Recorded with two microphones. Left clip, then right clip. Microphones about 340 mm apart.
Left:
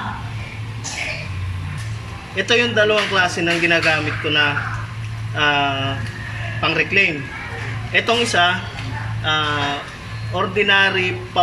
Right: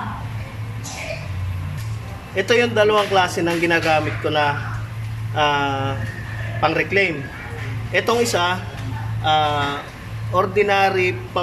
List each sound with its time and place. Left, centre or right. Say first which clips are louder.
2.3 s speech: even; centre